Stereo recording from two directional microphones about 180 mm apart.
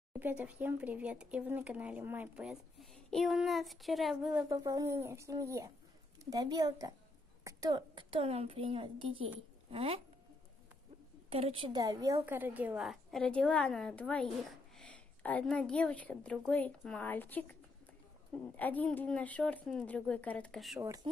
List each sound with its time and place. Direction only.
0.2 s speech: 10° right (ahead or behind)
4.5 s a woman's voice: 20° right (ahead or behind)
11.2 s a woman's voice: 30° right (ahead or behind); by 20.8 s centre (ahead or behind)
20.8 s a woman's voice: 20° right (ahead or behind)